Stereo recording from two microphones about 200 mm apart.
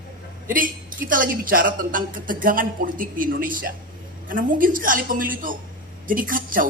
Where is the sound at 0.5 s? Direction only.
45° right (ahead or behind).